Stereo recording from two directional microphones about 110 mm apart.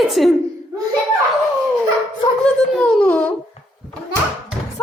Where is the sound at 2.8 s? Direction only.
10° left (ahead or behind).